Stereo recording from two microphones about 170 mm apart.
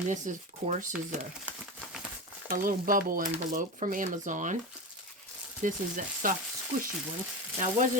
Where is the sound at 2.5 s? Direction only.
55° right (ahead or behind).